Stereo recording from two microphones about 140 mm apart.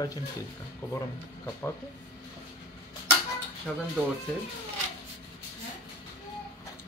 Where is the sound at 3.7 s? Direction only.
5° left (ahead or behind).